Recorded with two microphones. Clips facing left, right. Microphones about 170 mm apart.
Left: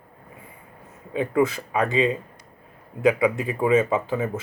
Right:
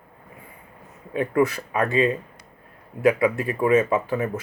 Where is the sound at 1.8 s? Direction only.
20° left (ahead or behind).